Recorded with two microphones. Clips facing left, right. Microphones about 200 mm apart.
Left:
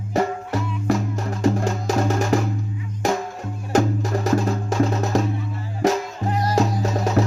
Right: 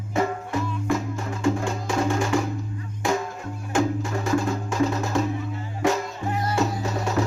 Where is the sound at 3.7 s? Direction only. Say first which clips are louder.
Left 4 dB; 40° left (ahead or behind).